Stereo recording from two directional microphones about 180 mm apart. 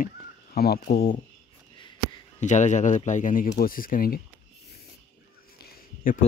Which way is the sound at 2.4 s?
45° left (ahead or behind).